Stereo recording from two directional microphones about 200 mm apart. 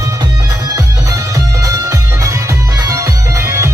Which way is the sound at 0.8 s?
15° right (ahead or behind).